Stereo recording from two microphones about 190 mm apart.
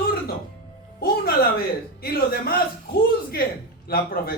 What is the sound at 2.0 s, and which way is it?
Speech, 55° left (ahead or behind).